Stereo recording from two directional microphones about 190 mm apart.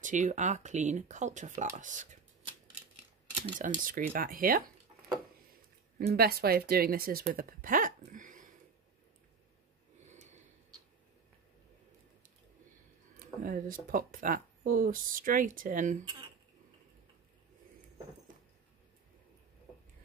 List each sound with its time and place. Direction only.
0.0 s speech: 40° right (ahead or behind)
3.5 s speech: 45° right (ahead or behind)
6.1 s speech: 55° right (ahead or behind)
7.3 s a sound: 45° right (ahead or behind)
10.0 s gasp: 40° right (ahead or behind)
13.4 s a sound: 45° right (ahead or behind)
13.8 s speech: 45° right (ahead or behind)